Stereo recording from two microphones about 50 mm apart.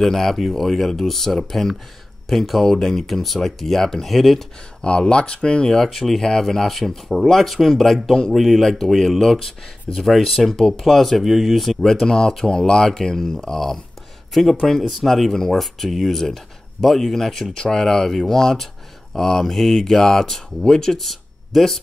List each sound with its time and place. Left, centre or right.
0.0 s speech: centre
4.8 s speech: left
5.8 s speech: centre
8.6 s speech: centre